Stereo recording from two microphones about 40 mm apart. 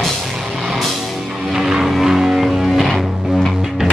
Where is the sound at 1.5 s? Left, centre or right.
Centre.